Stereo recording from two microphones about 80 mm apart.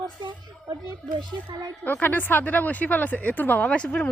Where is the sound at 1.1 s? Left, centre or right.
Right.